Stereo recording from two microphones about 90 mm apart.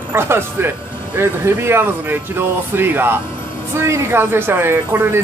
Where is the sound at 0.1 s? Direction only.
25° right (ahead or behind).